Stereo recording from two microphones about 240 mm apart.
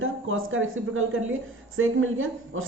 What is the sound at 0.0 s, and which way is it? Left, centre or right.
A woman's voice, right.